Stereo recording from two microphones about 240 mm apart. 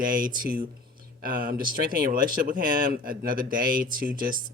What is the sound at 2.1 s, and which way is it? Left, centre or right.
Speech, right.